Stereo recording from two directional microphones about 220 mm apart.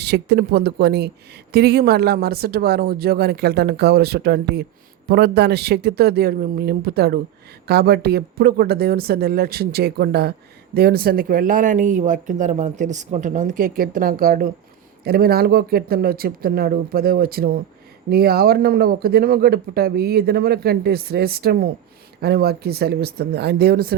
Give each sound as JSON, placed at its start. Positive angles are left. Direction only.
{"t": 0.0, "sound": "speech", "side_deg": -50}